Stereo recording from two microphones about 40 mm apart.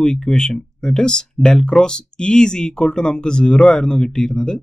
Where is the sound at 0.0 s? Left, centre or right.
Centre.